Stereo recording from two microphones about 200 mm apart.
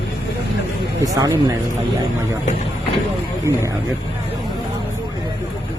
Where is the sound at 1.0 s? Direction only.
20° right (ahead or behind).